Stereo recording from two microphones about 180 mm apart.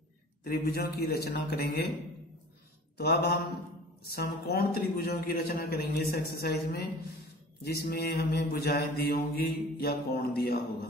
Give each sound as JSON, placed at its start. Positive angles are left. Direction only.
{"t": 0.4, "sound": "mantra", "side_deg": 60}
{"t": 3.0, "sound": "mantra", "side_deg": 60}